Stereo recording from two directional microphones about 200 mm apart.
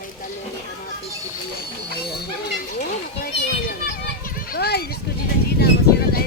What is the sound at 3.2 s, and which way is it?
Children playing, 45° left (ahead or behind).